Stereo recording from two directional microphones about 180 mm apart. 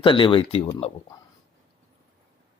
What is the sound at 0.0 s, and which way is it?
Speech, 30° left (ahead or behind).